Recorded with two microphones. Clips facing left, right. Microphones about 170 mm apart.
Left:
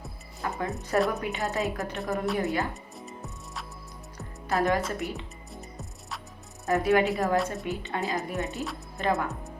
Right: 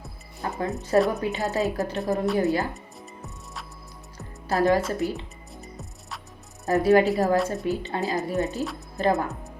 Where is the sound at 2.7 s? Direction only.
Centre (ahead or behind).